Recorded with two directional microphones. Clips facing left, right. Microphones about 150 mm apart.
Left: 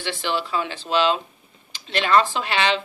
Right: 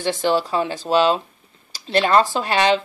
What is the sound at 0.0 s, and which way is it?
Speech, 40° right (ahead or behind).